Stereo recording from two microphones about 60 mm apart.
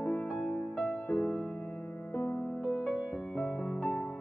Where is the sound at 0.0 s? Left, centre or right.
Left.